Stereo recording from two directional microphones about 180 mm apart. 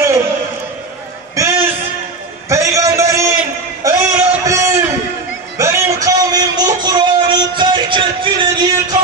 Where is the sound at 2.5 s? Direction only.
15° right (ahead or behind).